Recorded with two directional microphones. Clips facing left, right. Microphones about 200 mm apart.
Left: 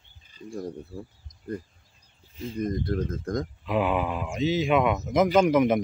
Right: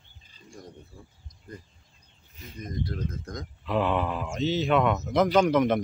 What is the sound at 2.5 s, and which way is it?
Speech, 55° left (ahead or behind).